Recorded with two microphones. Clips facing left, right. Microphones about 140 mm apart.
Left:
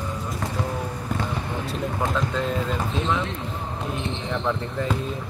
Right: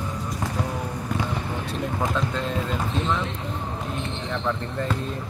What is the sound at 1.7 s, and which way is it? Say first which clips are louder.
Speech: even; centre (ahead or behind).